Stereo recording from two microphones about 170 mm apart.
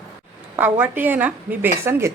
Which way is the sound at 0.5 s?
10° right (ahead or behind).